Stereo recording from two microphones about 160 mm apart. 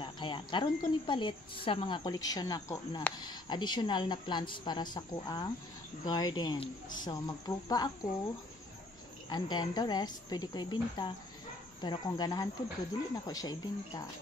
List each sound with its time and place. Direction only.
0.0 s a woman's voice: 30° left (ahead or behind)
9.3 s a woman's voice: 25° left (ahead or behind)